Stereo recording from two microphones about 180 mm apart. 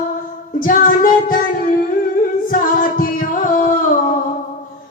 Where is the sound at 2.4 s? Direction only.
50° left (ahead or behind).